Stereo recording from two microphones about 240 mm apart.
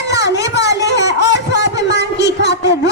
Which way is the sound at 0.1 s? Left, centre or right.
Left.